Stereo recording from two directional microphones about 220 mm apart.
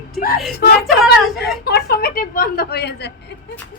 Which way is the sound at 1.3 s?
45° left (ahead or behind).